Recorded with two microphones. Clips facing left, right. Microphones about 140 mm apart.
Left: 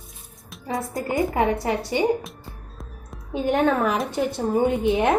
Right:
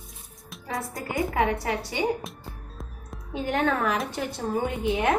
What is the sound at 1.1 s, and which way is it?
Speech, 25° left (ahead or behind).